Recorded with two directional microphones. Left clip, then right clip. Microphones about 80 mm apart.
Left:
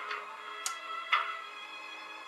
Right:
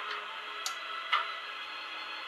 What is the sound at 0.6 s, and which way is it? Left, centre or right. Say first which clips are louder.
Music: even; centre.